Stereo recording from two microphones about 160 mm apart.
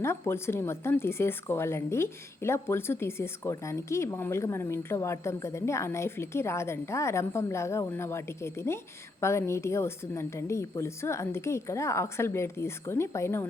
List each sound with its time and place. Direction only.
0.0 s speech: 15° left (ahead or behind)